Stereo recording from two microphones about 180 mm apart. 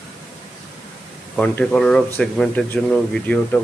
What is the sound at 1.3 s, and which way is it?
Speech, 5° left (ahead or behind).